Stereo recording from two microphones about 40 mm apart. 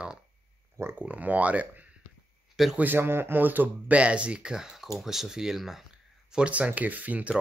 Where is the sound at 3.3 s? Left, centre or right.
Right.